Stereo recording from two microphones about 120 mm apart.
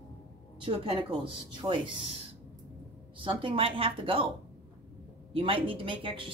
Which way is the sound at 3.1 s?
45° right (ahead or behind).